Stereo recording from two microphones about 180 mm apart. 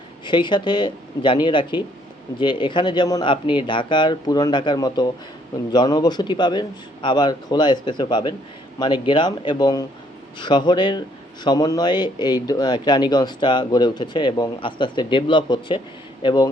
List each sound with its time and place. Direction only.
0.3 s speech: 25° left (ahead or behind)